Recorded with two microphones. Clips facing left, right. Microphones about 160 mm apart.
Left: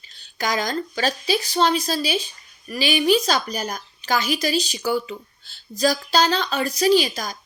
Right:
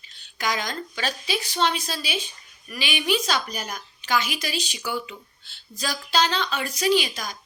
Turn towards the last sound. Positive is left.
turn(degrees=40)  # may be behind; listen again after turning